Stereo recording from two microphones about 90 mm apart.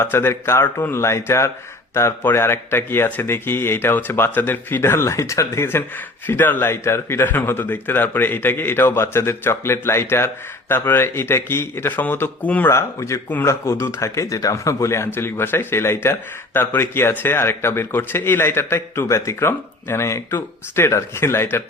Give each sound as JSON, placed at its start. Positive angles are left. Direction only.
{"t": 0.0, "sound": "a man's voice", "side_deg": 25}
{"t": 12.7, "sound": "a man's voice", "side_deg": 35}